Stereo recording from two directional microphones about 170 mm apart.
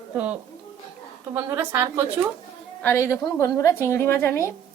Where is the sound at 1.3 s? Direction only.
10° right (ahead or behind).